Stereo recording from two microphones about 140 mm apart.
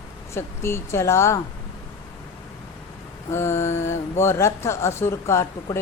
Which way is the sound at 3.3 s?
20° left (ahead or behind).